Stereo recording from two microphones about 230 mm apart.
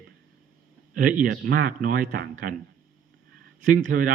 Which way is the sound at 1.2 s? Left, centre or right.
Right.